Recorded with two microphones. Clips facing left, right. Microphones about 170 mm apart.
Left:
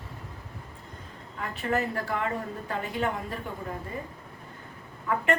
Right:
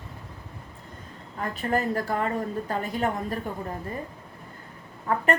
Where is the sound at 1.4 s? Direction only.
40° right (ahead or behind).